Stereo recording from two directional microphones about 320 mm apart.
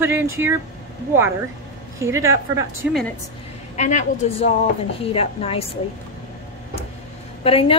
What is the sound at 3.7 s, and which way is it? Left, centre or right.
A woman's voice, left.